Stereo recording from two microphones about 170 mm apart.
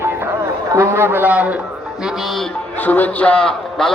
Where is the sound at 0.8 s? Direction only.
15° right (ahead or behind).